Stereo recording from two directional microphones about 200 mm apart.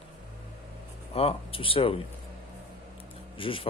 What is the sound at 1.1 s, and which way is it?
Speech, 30° left (ahead or behind).